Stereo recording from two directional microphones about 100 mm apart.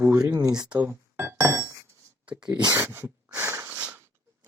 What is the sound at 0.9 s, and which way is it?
Music, 25° right (ahead or behind).